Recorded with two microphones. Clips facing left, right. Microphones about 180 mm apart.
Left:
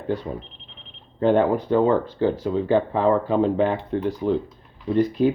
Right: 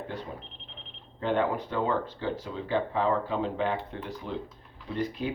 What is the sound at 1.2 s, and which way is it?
Speech, 40° left (ahead or behind).